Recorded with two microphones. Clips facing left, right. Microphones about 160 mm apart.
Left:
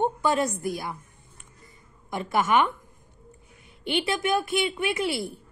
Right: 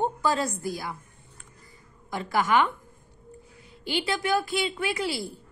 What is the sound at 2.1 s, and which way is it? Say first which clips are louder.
Speech: left 1 dB; 20° left (ahead or behind).